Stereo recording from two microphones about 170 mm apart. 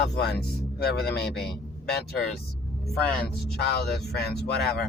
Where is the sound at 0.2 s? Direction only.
75° left (ahead or behind).